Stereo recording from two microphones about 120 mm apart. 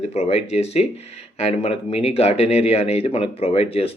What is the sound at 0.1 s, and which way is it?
Speech, 65° left (ahead or behind).